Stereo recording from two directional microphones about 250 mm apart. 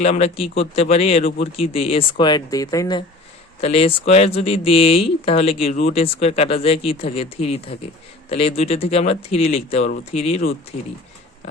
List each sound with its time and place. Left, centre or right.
0.0 s speech: left